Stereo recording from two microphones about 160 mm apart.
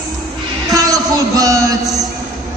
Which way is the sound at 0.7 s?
20° right (ahead or behind).